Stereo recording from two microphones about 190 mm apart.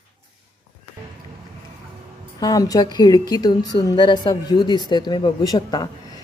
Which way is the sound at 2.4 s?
20° left (ahead or behind).